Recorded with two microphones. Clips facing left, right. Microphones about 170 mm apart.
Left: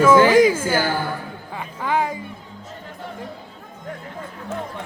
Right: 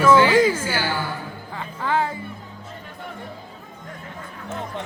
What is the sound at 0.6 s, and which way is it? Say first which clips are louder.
Speech: left 4 dB; 50° left (ahead or behind).